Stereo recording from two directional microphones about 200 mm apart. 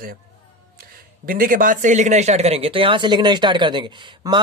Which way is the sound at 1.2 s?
45° right (ahead or behind).